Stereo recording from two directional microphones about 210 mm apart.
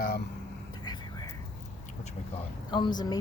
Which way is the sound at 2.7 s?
20° left (ahead or behind).